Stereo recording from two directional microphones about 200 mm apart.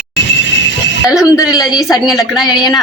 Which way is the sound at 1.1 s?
5° right (ahead or behind).